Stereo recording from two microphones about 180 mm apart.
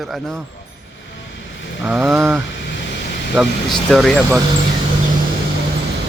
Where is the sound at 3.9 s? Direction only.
Centre (ahead or behind).